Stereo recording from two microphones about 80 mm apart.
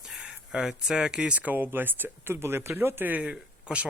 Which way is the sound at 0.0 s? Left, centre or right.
Centre.